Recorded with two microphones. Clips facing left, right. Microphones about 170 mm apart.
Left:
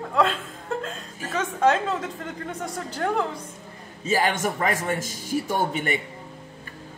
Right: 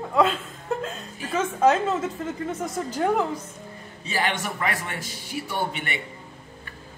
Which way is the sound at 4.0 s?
45° left (ahead or behind).